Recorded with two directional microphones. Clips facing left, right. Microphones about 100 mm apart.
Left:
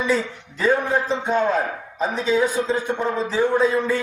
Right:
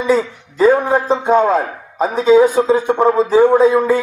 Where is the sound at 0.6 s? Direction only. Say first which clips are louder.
Right 8 dB; 50° right (ahead or behind).